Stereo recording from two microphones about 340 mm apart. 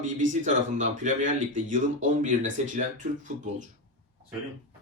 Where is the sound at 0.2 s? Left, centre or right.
Right.